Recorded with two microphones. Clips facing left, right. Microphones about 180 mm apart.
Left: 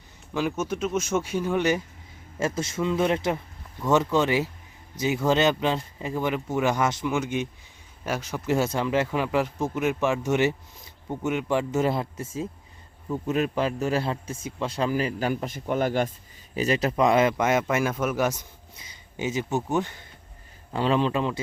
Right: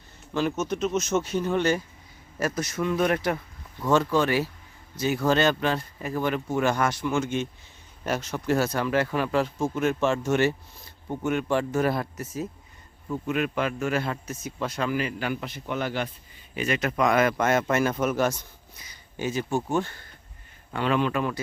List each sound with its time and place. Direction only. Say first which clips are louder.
0.3 s speech: right 1 dB; 10° left (ahead or behind)
2.4 s speech: left 1 dB; 25° left (ahead or behind)
8.5 s a man's voice: left 1 dB; 20° left (ahead or behind); by 16.1 s 45° left (ahead or behind)
16.6 s a man's voice: left 3 dB; 35° left (ahead or behind)
17.3 s speech: even; 15° left (ahead or behind)
18.8 s speech: left 1 dB; 20° left (ahead or behind)
20.7 s speech: left 1 dB; 30° left (ahead or behind)